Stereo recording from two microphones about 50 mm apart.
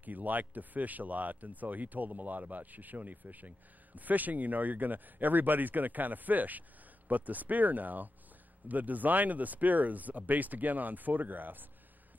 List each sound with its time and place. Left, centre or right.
0.0 s speech: right